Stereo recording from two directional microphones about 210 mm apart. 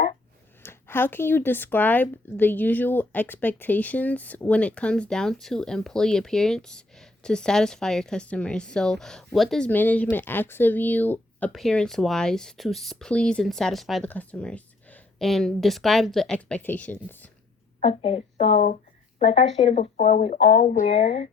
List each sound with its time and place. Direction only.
0.6 s speech: 10° left (ahead or behind)
17.7 s speech: 30° left (ahead or behind)